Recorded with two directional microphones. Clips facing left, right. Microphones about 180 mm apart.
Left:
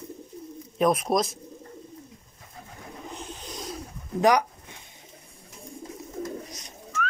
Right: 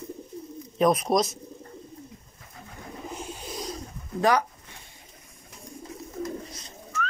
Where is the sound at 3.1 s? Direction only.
10° right (ahead or behind).